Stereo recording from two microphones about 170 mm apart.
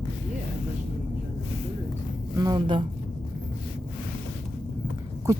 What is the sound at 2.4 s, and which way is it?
Speech, 25° right (ahead or behind).